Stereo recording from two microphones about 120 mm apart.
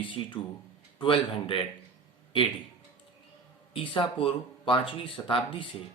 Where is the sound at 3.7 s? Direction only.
45° left (ahead or behind).